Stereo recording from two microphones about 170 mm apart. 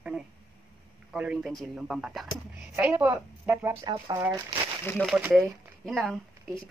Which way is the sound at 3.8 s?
25° right (ahead or behind).